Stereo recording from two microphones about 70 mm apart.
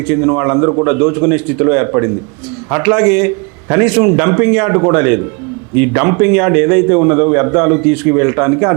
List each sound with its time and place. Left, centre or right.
0.1 s a man's voice: right